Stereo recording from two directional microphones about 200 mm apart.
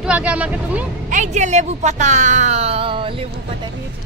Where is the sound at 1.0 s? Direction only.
35° right (ahead or behind).